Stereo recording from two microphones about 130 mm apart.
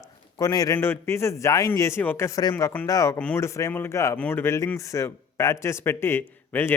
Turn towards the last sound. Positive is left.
turn(degrees=15)  # may be behind; listen again after turning